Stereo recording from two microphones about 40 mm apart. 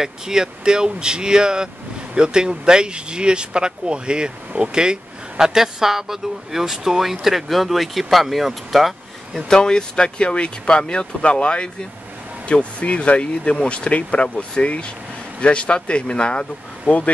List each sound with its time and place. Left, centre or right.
0.0 s speech: centre
9.5 s speech: centre